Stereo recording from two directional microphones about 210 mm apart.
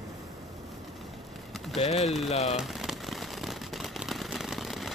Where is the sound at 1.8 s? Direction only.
30° left (ahead or behind).